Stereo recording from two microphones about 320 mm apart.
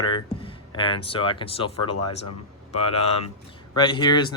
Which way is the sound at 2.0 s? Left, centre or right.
Left.